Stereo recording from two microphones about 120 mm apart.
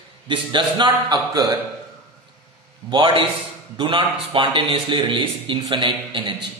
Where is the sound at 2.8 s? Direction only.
40° right (ahead or behind).